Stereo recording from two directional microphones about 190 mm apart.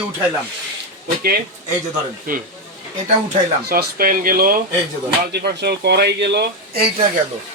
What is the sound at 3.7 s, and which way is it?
Speech, 55° right (ahead or behind).